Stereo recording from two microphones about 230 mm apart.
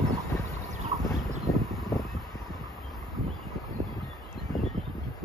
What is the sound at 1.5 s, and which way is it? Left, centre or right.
Vehicle, centre.